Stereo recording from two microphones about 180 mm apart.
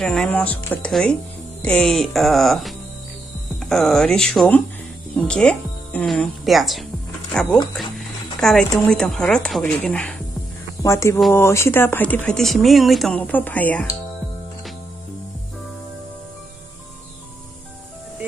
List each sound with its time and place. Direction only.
0.0 s speech: 5° left (ahead or behind)